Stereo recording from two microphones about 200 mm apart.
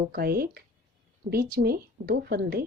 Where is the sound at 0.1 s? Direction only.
50° right (ahead or behind).